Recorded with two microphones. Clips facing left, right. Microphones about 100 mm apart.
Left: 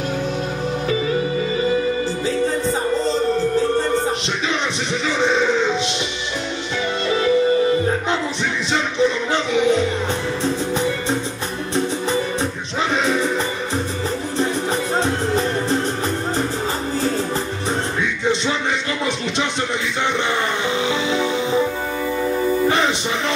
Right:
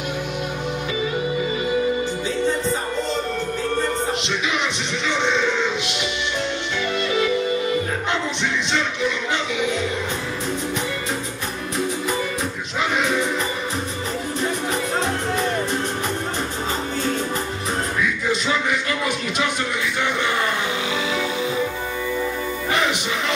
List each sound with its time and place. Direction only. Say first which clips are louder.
2.2 s music: left 3 dB; 35° left (ahead or behind)
7.1 s music: left 6 dB; 35° left (ahead or behind)
9.0 s music: left 5 dB; 30° left (ahead or behind)
12.9 s music: left 2 dB; 30° left (ahead or behind)